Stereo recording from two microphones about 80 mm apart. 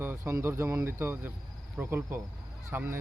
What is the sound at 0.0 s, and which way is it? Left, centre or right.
Speech, right.